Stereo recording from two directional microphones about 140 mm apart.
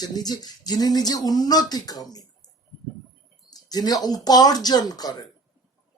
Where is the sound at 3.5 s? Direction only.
30° left (ahead or behind).